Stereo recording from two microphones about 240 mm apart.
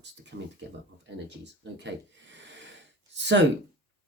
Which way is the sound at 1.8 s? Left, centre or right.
Right.